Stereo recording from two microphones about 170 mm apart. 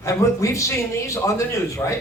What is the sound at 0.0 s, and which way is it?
A woman's voice, 15° left (ahead or behind).